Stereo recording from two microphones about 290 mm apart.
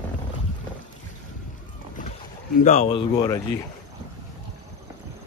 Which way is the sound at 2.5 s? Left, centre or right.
Left.